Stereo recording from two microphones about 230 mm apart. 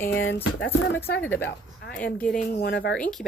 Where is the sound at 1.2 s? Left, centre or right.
Centre.